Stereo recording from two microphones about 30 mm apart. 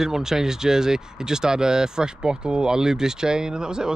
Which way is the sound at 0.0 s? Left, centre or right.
Centre.